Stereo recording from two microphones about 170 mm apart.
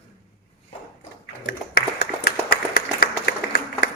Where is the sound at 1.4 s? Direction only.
80° left.